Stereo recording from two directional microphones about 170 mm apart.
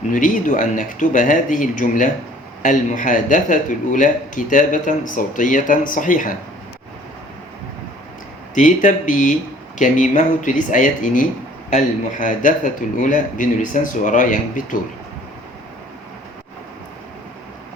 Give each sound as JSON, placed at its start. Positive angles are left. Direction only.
{"t": 0.1, "sound": "a man's voice", "side_deg": 50}
{"t": 8.5, "sound": "a man's voice", "side_deg": 45}